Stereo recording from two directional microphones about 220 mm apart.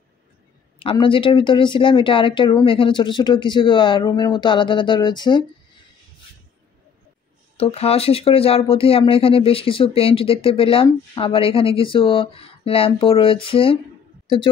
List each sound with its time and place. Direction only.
0.7 s speech: 25° left (ahead or behind)
7.5 s speech: 25° left (ahead or behind)